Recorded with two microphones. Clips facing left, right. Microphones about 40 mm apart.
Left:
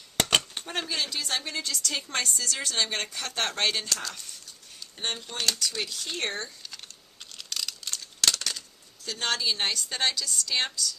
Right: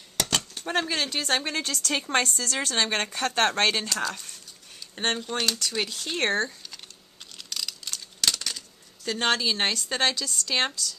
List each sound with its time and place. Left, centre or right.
0.2 s a sound: left
0.6 s a woman's voice: right
1.2 s a woman's voice: right
5.4 s speech: centre
5.8 s a woman's voice: right
6.1 s speech: right
7.3 s a sound: centre
9.0 s a woman's voice: right